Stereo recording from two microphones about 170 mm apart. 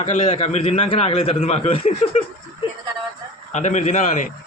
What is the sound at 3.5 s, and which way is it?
Speech, 45° left (ahead or behind).